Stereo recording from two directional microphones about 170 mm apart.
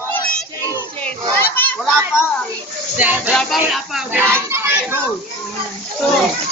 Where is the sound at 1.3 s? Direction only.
10° left (ahead or behind).